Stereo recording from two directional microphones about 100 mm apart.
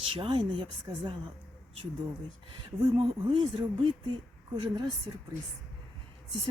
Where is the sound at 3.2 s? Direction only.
55° right (ahead or behind).